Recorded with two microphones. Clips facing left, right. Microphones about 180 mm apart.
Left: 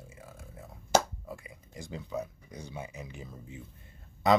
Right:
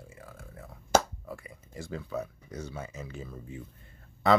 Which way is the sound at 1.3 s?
15° left (ahead or behind).